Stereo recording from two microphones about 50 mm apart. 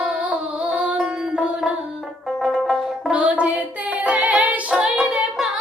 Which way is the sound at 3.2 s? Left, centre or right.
Right.